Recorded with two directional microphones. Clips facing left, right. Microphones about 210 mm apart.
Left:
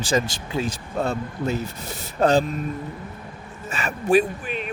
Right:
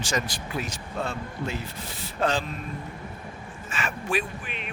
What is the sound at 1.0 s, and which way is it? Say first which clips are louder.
A man's voice: left 6 dB; 40° left (ahead or behind).